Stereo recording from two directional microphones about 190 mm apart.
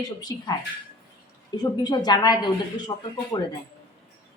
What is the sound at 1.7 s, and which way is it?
Speech, 20° left (ahead or behind).